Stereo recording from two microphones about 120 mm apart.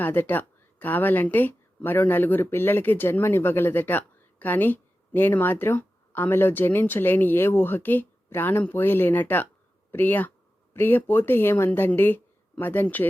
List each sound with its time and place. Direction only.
0.0 s speech: 15° left (ahead or behind)